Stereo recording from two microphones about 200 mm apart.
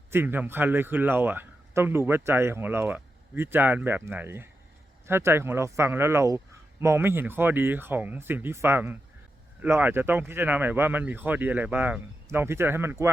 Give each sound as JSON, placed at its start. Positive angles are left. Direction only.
{"t": 0.1, "sound": "a man's voice", "side_deg": -10}